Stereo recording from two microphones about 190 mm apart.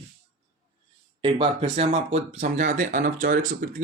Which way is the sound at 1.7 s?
35° right (ahead or behind).